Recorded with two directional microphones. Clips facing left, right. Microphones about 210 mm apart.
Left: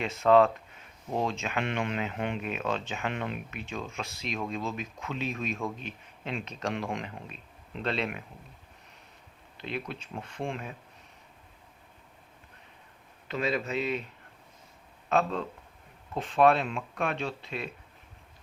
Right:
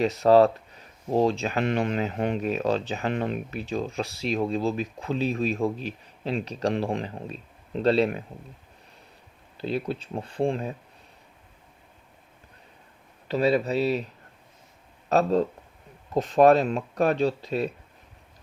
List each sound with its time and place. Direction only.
0.0 s speech: 35° right (ahead or behind)
9.6 s speech: 35° right (ahead or behind)
13.2 s speech: 35° right (ahead or behind)
15.1 s speech: 40° right (ahead or behind)